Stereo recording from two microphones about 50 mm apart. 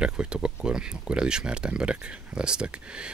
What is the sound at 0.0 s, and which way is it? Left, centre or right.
Speech, centre.